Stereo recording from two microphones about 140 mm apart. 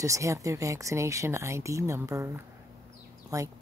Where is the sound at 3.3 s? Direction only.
25° right (ahead or behind).